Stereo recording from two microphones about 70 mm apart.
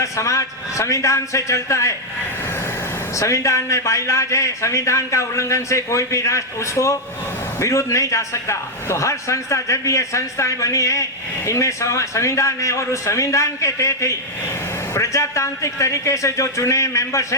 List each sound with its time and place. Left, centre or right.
0.0 s a man's voice: left
3.2 s a man's voice: left